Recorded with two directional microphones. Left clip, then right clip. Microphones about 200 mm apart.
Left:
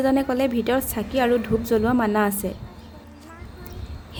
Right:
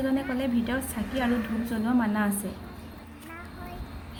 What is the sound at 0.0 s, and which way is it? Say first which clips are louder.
A woman's voice: left 8 dB; 60° left (ahead or behind).